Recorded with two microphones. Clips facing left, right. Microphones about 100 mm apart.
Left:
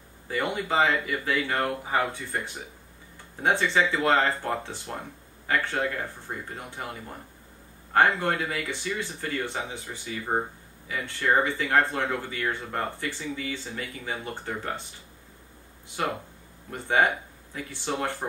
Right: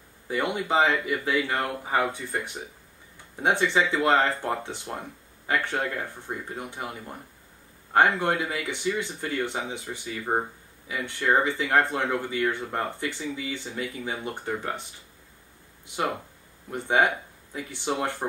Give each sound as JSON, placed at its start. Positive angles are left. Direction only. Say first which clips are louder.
{"t": 0.3, "sound": "speech", "louder": "right 2 dB", "side_deg": -20}
{"t": 1.6, "sound": "speech", "louder": "even", "side_deg": -10}
{"t": 16.7, "sound": "speech", "louder": "right 1 dB", "side_deg": -20}